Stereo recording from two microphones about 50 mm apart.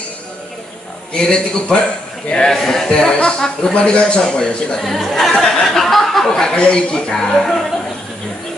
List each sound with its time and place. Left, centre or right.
1.1 s a man's voice: centre
4.8 s speech: centre
5.3 s speech: left
5.7 s a sound: centre
6.5 s a man's voice: centre